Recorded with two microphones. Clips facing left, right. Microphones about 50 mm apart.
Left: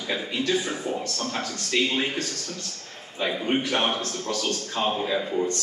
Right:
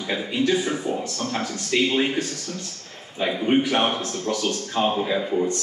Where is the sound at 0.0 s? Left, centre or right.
Centre.